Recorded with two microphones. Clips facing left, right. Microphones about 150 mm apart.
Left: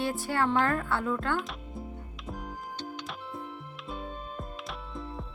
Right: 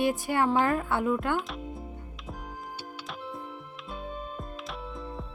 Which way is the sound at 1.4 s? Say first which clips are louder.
Right 2 dB; centre (ahead or behind).